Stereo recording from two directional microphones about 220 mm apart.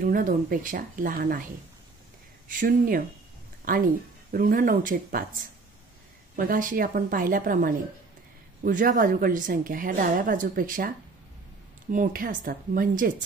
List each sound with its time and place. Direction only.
0.0 s a woman's voice: 40° right (ahead or behind)
2.4 s a woman's voice: 40° right (ahead or behind)
6.3 s a woman's voice: 40° right (ahead or behind)
11.9 s a woman's voice: 40° right (ahead or behind)